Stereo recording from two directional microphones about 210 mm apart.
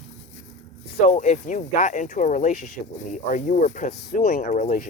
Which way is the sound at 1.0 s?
35° left (ahead or behind).